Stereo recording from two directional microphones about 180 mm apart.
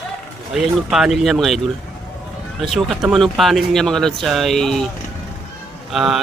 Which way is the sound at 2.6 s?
Centre (ahead or behind).